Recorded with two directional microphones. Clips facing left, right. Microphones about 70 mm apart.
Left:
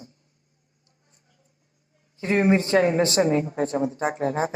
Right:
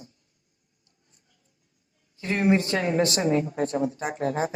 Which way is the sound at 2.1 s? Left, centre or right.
Left.